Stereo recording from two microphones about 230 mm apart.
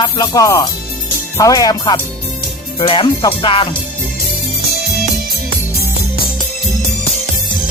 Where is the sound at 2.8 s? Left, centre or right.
Left.